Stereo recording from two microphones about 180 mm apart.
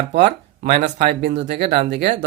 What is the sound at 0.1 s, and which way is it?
Speech, 70° right (ahead or behind).